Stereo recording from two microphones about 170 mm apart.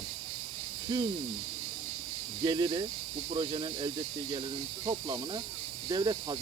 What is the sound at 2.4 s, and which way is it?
Speech, 25° right (ahead or behind).